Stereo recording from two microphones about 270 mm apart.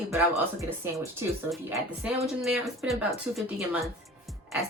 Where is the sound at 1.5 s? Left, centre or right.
Centre.